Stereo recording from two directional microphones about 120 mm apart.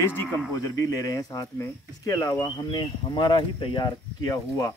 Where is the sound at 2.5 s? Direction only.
40° left (ahead or behind).